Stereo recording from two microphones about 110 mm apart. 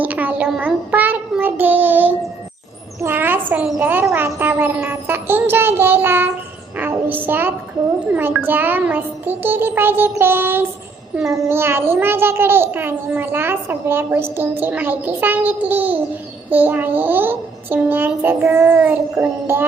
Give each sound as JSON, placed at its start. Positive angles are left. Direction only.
{"t": 0.0, "sound": "a sound", "side_deg": -15}
{"t": 0.6, "sound": "child singing", "side_deg": -15}
{"t": 3.0, "sound": "a child's voice", "side_deg": -20}
{"t": 4.1, "sound": "music", "side_deg": -20}
{"t": 6.7, "sound": "a sound", "side_deg": -15}
{"t": 8.0, "sound": "a child's voice", "side_deg": -15}